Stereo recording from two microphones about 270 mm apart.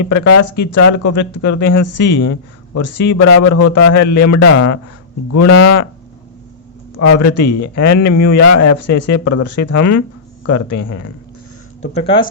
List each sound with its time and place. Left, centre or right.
0.1 s speech: left
6.9 s speech: left
11.9 s speech: centre